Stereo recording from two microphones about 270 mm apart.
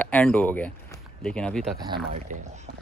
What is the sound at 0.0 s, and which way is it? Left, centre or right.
Speech, centre.